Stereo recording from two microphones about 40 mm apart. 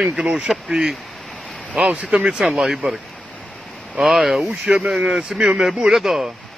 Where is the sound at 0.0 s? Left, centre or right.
Centre.